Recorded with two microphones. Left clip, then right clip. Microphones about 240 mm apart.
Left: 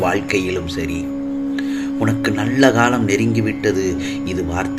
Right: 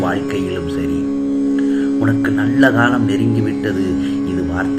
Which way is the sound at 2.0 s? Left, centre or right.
Left.